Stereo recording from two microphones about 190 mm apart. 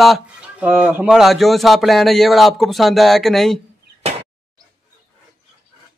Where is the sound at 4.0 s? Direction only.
30° right (ahead or behind).